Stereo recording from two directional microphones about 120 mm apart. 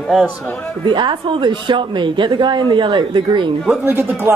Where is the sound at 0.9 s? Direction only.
40° right (ahead or behind).